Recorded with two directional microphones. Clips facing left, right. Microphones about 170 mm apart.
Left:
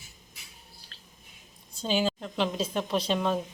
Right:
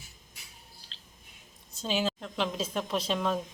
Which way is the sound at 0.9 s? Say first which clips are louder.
Left 1 dB; 20° right (ahead or behind).